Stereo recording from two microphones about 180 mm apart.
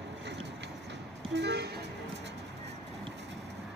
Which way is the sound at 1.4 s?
70° right (ahead or behind).